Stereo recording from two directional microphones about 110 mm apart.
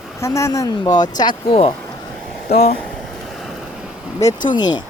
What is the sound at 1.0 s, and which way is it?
Speech, 40° left (ahead or behind).